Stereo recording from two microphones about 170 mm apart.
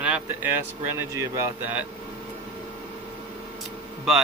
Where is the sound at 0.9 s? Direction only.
20° right (ahead or behind).